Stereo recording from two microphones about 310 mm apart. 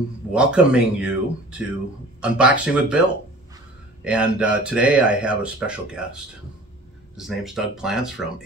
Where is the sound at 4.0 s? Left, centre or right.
Centre.